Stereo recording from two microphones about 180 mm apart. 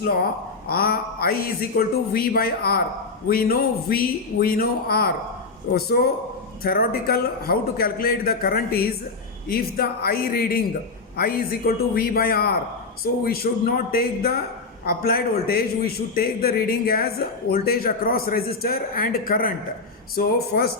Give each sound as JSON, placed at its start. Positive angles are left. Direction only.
{"t": 0.7, "sound": "a man's voice", "side_deg": 55}